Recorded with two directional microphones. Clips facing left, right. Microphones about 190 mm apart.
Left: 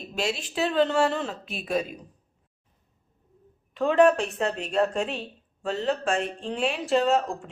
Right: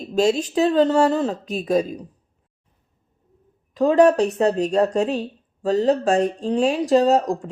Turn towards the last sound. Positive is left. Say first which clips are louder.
# right 6 dB
turn(degrees=-40)  # may be behind; listen again after turning